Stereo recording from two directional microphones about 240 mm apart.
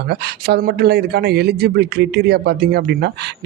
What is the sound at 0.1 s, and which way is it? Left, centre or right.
Speech, right.